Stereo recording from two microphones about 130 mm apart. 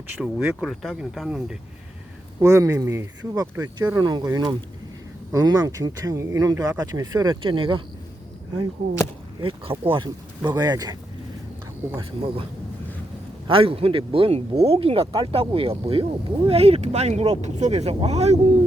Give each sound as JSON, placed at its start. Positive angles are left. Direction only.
{"t": 0.2, "sound": "speech", "side_deg": -5}
{"t": 2.4, "sound": "speech", "side_deg": -25}
{"t": 7.4, "sound": "speech", "side_deg": -40}
{"t": 9.4, "sound": "speech", "side_deg": -45}
{"t": 11.9, "sound": "speech", "side_deg": -45}
{"t": 13.5, "sound": "speech", "side_deg": -45}